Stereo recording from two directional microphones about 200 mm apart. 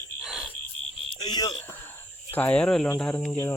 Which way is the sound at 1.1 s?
20° left (ahead or behind).